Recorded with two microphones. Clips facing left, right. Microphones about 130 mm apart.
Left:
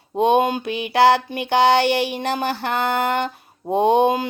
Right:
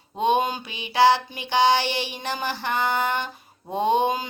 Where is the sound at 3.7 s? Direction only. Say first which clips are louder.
Left 5 dB; 60° left (ahead or behind).